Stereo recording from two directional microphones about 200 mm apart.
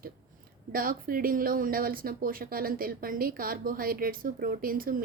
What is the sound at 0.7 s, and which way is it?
Speech, 45° right (ahead or behind).